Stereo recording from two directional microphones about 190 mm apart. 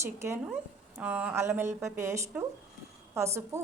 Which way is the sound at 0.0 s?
15° right (ahead or behind).